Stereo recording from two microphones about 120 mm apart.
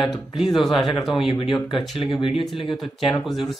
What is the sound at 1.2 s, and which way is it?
Speech, 45° left (ahead or behind).